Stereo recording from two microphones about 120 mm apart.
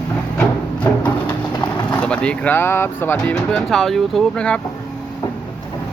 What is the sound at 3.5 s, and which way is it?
Speech, 5° left (ahead or behind).